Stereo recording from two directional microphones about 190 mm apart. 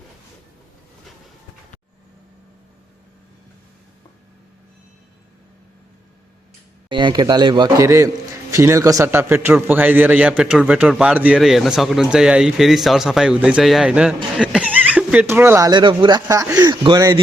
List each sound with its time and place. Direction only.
6.8 s a man's voice: 25° right (ahead or behind)